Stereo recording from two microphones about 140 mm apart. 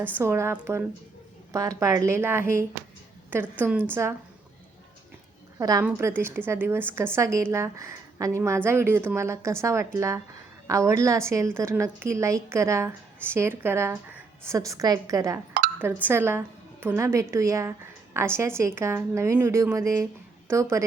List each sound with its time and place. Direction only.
0.0 s a woman's voice: 15° right (ahead or behind)
5.5 s a woman's voice: 25° right (ahead or behind)